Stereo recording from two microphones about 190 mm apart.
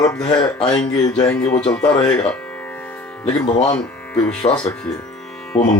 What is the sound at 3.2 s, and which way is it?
Speech, 30° left (ahead or behind).